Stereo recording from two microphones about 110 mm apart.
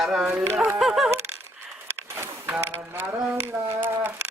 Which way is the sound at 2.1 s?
20° right (ahead or behind).